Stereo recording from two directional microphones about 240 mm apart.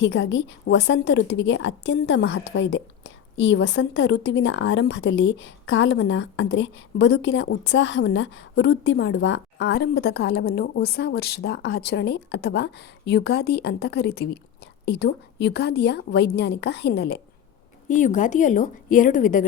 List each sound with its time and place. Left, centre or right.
0.0 s a woman's voice: left
17.8 s a woman's voice: left